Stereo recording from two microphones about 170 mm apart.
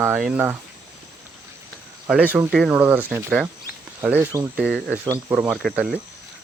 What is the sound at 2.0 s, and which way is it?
Speech, 10° right (ahead or behind).